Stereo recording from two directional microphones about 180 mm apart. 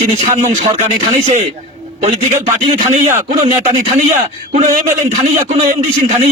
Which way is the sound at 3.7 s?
40° right (ahead or behind).